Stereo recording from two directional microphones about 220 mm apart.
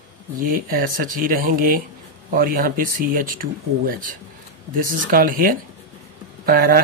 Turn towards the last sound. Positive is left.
turn(degrees=-40)  # may be behind; listen again after turning